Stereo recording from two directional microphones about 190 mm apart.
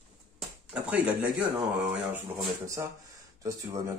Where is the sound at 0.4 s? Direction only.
5° right (ahead or behind).